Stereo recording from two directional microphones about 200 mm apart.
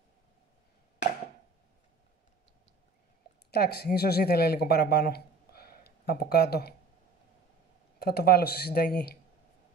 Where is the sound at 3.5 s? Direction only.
50° left (ahead or behind).